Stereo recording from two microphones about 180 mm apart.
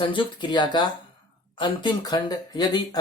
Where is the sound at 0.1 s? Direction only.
25° left (ahead or behind).